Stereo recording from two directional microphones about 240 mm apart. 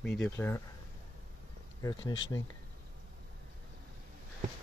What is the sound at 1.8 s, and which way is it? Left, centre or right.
Speech, centre.